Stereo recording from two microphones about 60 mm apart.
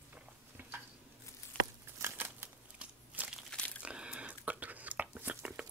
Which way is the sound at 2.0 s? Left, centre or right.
Right.